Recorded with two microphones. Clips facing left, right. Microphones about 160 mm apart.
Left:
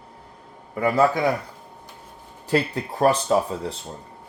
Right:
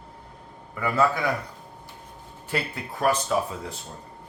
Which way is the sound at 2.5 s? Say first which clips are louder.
Left 8 dB; 35° left (ahead or behind).